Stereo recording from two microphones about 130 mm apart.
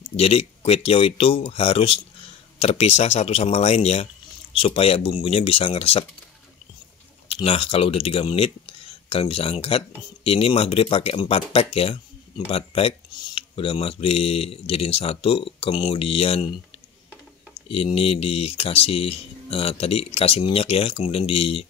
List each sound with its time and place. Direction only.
0.1 s speech: 45° left (ahead or behind)
7.2 s speech: 45° left (ahead or behind)
17.6 s speech: 50° left (ahead or behind)